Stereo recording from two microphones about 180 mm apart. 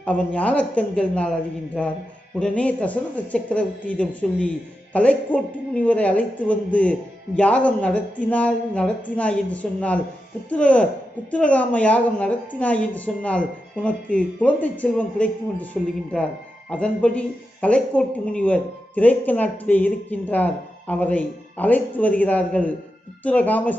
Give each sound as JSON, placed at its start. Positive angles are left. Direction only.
{"t": 0.0, "sound": "a man's voice", "side_deg": 10}